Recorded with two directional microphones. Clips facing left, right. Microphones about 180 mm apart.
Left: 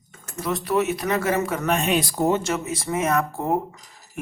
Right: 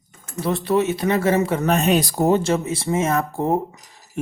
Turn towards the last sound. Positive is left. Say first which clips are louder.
# right 6 dB
turn(degrees=-25)  # may be behind; listen again after turning